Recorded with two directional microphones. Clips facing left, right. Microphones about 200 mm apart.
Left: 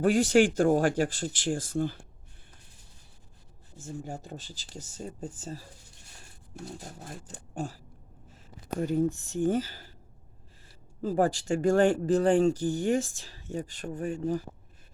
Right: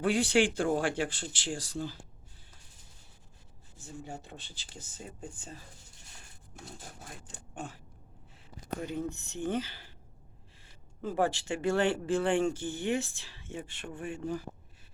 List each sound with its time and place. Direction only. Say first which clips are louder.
0.0 s speech: left 5 dB; 45° left (ahead or behind)
3.8 s speech: left 5 dB; 45° left (ahead or behind)
6.7 s speech: left 6 dB; 40° left (ahead or behind)
8.8 s speech: left 10 dB; 45° left (ahead or behind)